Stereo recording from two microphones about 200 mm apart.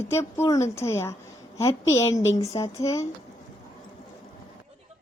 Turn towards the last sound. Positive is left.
turn(degrees=15)  # may be behind; listen again after turning